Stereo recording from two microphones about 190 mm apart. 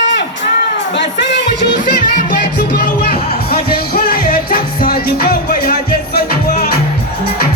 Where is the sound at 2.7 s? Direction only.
60° left (ahead or behind).